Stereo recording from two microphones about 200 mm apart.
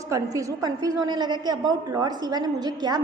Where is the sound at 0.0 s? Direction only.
15° right (ahead or behind).